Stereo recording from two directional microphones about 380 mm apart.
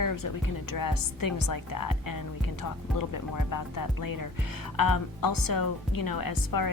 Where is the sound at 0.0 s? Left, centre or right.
Left.